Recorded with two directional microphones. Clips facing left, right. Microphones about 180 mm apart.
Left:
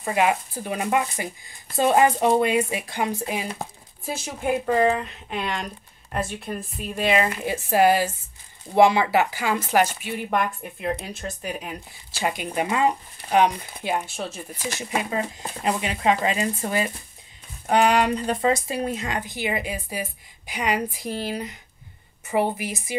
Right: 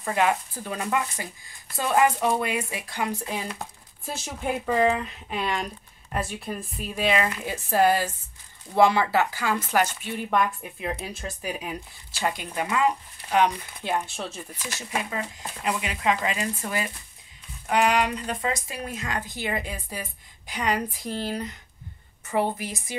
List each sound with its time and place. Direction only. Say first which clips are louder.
0.0 s speech: left 2 dB; 10° left (ahead or behind)
4.0 s speech: left 3 dB; 5° left (ahead or behind)
10.0 s speech: even; 5° left (ahead or behind)
12.2 s speech: left 3 dB; 15° left (ahead or behind)
13.8 s speech: left 2 dB; 5° left (ahead or behind)
15.0 s speech: left 5 dB; 30° left (ahead or behind); by 22.9 s 10° left (ahead or behind)